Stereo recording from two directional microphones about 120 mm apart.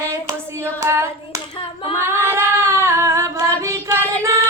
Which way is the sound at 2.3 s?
20° right (ahead or behind).